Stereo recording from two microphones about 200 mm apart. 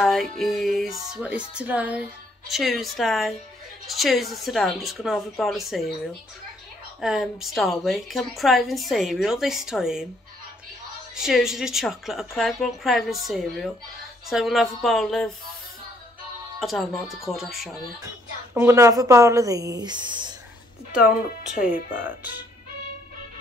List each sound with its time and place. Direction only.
0.0 s a woman's voice: centre (ahead or behind)
7.0 s a woman's voice: centre (ahead or behind)
11.1 s a woman's voice: centre (ahead or behind)
16.5 s a woman's voice: centre (ahead or behind)
18.5 s speech: 10° right (ahead or behind)
21.5 s speech: 10° right (ahead or behind)